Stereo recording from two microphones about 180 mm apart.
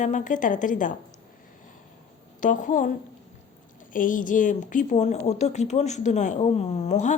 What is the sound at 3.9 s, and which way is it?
Speech, 50° left (ahead or behind).